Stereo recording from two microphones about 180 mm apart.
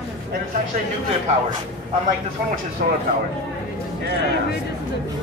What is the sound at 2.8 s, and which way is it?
Speech, 55° right (ahead or behind).